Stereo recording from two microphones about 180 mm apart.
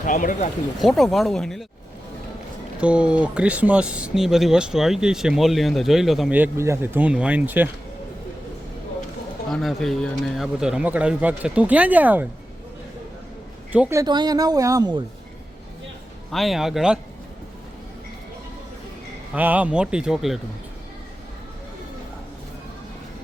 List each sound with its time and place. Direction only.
0.0 s speech: 45° left (ahead or behind)
0.8 s speech: centre (ahead or behind)
2.8 s speech: 5° right (ahead or behind)
9.5 s speech: centre (ahead or behind)
13.7 s speech: 10° right (ahead or behind)
14.0 s speech: 20° right (ahead or behind)
16.3 s speech: centre (ahead or behind)
19.3 s speech: 10° right (ahead or behind)